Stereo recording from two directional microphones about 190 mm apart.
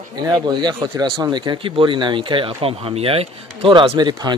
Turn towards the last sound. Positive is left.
turn(degrees=-20)  # may be behind; listen again after turning